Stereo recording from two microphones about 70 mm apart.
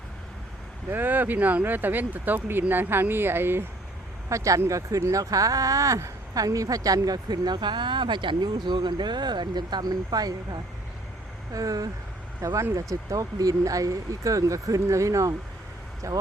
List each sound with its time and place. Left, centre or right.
0.9 s speech: right
4.3 s speech: right
11.5 s speech: right
12.5 s speech: right